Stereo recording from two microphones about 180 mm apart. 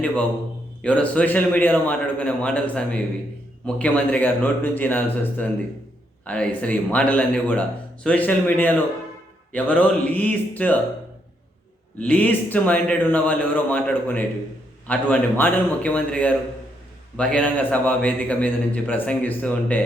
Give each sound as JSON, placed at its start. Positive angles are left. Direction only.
{"t": 0.8, "sound": "a man's voice", "side_deg": 5}
{"t": 11.9, "sound": "a man's voice", "side_deg": 10}